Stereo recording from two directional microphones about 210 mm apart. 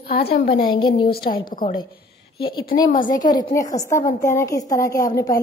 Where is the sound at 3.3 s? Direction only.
15° left (ahead or behind).